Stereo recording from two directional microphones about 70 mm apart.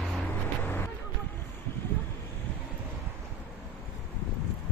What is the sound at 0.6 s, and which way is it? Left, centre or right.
Vehicle, left.